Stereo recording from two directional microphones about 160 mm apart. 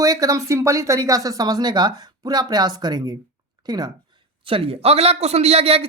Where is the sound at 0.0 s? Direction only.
20° right (ahead or behind).